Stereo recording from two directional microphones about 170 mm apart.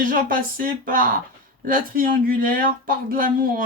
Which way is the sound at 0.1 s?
55° right (ahead or behind).